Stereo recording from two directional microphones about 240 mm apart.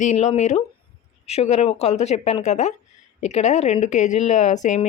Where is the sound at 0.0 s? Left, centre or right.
Left.